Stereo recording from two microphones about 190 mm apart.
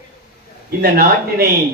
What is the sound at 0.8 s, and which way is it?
Speech, 50° right (ahead or behind).